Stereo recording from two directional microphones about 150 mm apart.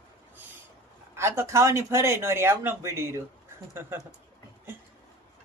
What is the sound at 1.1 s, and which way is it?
Speech, 15° right (ahead or behind).